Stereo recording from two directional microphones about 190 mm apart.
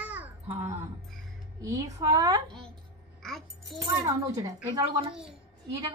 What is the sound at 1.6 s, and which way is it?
Speech, 15° right (ahead or behind).